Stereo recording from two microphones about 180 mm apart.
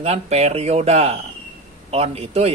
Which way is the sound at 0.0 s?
35° right (ahead or behind).